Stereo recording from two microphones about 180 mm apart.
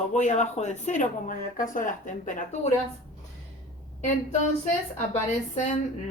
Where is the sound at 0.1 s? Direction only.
40° left (ahead or behind).